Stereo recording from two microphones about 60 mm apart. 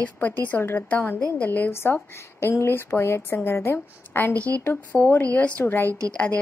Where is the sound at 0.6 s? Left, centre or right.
Left.